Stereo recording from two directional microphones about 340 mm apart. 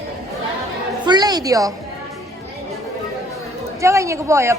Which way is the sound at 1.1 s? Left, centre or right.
Centre.